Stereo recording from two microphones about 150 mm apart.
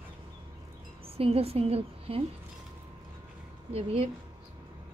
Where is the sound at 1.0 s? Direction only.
40° right (ahead or behind).